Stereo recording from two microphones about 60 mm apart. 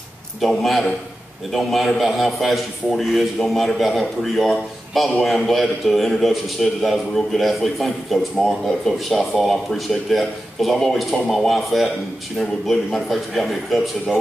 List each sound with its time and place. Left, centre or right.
0.4 s a man's voice: centre